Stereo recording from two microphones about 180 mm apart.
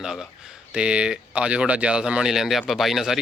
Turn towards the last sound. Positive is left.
turn(degrees=0)  # may be behind; listen again after turning